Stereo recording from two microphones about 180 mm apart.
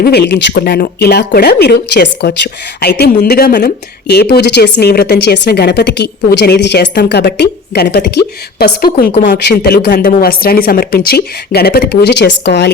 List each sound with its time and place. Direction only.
0.0 s speech: 65° left (ahead or behind)
9.2 s speech: 65° left (ahead or behind)